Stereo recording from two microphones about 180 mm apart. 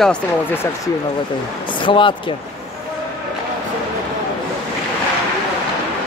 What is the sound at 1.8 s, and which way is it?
Speech, 25° left (ahead or behind).